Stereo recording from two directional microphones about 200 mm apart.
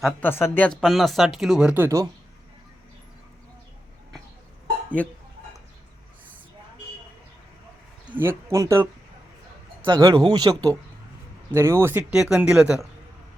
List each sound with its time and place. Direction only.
0.0 s speech: 10° left (ahead or behind); by 2.0 s 15° right (ahead or behind)
8.0 s speech: 10° right (ahead or behind)